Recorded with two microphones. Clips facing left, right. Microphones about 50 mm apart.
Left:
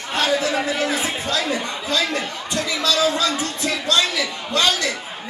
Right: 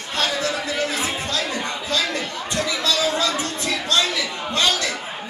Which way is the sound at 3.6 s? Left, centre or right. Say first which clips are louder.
Left 2 dB; left.